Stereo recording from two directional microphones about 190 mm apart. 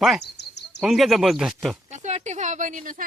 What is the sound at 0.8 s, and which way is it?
Speech, centre (ahead or behind).